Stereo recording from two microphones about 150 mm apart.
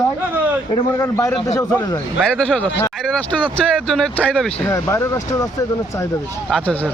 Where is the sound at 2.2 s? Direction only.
5° left (ahead or behind).